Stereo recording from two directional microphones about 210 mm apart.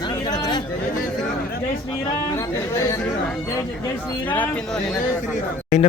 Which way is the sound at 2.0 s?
15° left (ahead or behind).